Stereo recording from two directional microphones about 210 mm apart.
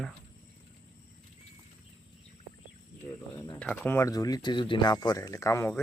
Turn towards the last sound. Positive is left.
turn(degrees=15)  # may be behind; listen again after turning